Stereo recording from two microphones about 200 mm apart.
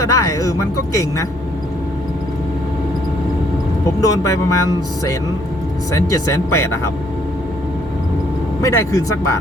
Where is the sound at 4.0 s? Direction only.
15° left (ahead or behind).